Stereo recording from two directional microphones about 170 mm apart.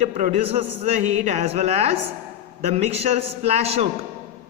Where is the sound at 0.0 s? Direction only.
45° right (ahead or behind).